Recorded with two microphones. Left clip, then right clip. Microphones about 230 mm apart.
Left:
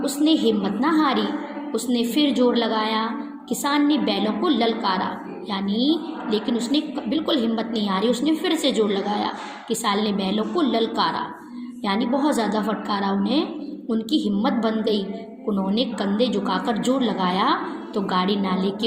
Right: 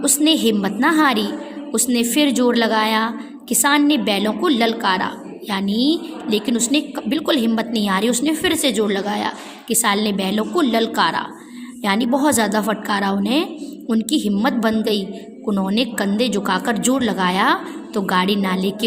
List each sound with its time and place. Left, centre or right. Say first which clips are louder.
0.0 s a woman's voice: right 3 dB; right
2.3 s a woman's voice: right 2 dB; right
2.6 s a woman's voice: right 5 dB; right
5.6 s a woman's voice: right 2 dB; right
6.3 s a woman's voice: right 4 dB; right